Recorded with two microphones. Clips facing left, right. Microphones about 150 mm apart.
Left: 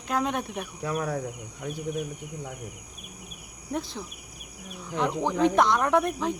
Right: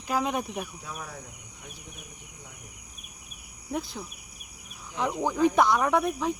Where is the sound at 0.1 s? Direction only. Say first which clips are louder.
Even; 5° right (ahead or behind).